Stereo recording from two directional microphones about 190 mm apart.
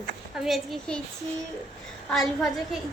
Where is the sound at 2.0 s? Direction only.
Centre (ahead or behind).